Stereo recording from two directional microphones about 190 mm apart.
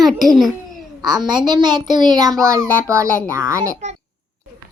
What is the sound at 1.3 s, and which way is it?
A child's voice, 25° right (ahead or behind).